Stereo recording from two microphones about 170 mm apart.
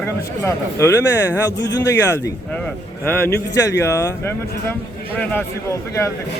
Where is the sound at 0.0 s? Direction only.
15° left (ahead or behind).